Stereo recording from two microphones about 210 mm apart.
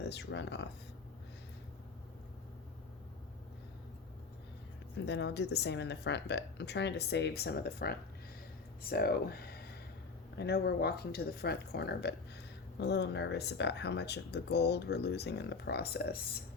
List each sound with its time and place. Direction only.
0.0 s speech: 55° left (ahead or behind)
5.0 s speech: 55° left (ahead or behind)